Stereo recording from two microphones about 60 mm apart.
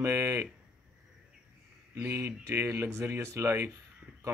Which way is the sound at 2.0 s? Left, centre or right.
Right.